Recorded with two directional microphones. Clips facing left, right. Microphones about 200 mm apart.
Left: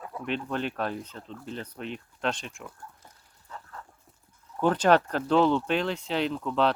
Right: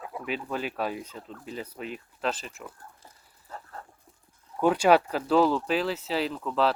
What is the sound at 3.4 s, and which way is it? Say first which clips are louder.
Livestock: right 2 dB; 35° right (ahead or behind).